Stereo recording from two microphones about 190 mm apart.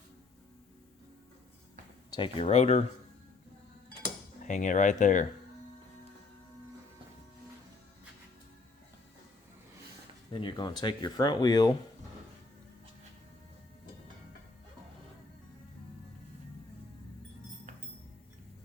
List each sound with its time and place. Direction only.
2.0 s speech: 25° left (ahead or behind)
4.4 s speech: 40° left (ahead or behind)
10.4 s speech: 25° left (ahead or behind)